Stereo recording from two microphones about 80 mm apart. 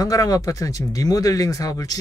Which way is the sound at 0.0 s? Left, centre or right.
Left.